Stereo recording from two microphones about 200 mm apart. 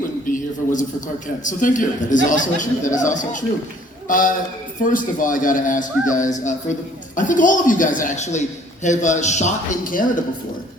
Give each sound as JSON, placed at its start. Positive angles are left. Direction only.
{"t": 0.3, "sound": "a man's voice", "side_deg": 40}